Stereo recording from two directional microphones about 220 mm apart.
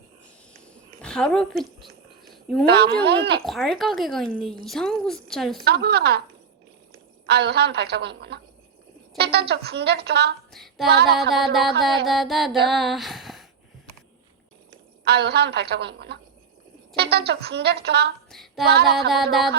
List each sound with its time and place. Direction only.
1.0 s a woman's voice: 5° left (ahead or behind)
2.2 s a sound: centre (ahead or behind)
2.6 s speech: 50° right (ahead or behind)
3.4 s speech: centre (ahead or behind)
5.6 s speech: 50° right (ahead or behind)
7.3 s speech: 50° right (ahead or behind)
10.5 s female singing: centre (ahead or behind)
10.8 s speech: 45° right (ahead or behind)
11.3 s speech: centre (ahead or behind)
15.0 s speech: 50° right (ahead or behind)
18.3 s female singing: centre (ahead or behind)
18.6 s speech: 45° right (ahead or behind)
19.1 s speech: centre (ahead or behind)